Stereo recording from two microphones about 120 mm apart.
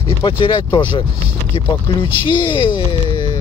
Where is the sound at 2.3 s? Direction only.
45° left (ahead or behind).